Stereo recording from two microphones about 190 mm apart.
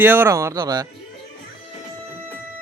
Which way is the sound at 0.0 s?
10° right (ahead or behind).